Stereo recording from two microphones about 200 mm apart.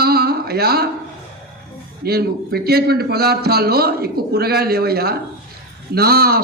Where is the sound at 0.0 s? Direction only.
50° right (ahead or behind).